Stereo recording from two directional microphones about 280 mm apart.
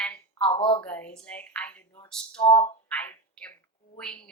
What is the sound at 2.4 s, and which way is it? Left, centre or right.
Speech, left.